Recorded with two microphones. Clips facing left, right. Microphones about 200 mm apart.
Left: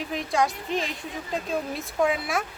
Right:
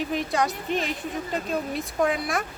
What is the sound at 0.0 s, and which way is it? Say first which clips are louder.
A woman's voice: even; centre (ahead or behind).